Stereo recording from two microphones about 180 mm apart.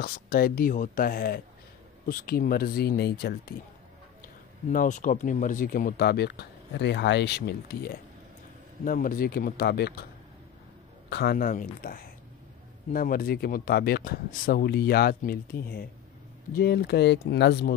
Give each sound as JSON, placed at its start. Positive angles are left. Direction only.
{"t": 0.0, "sound": "speech", "side_deg": 55}
{"t": 4.6, "sound": "speech", "side_deg": 45}
{"t": 8.8, "sound": "speech", "side_deg": 50}
{"t": 11.1, "sound": "speech", "side_deg": 60}